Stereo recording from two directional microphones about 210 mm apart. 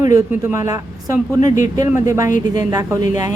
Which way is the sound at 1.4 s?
35° left (ahead or behind).